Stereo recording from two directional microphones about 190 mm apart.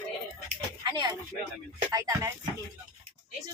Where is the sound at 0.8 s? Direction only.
20° right (ahead or behind).